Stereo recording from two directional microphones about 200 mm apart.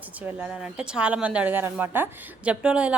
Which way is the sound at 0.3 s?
5° right (ahead or behind).